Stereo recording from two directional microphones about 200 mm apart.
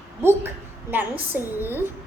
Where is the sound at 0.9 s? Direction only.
10° right (ahead or behind).